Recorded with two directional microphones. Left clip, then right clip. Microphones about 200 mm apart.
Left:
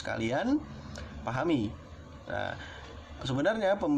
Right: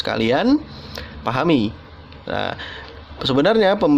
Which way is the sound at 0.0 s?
50° right (ahead or behind).